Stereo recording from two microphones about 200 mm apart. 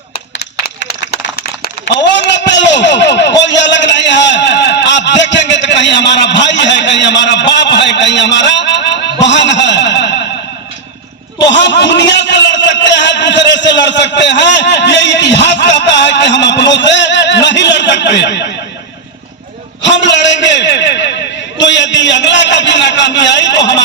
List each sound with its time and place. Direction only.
0.3 s clapping: 55° left (ahead or behind)
1.8 s a sound: 60° left (ahead or behind)
11.5 s a man's voice: 60° left (ahead or behind)
19.8 s a man's voice: 65° left (ahead or behind)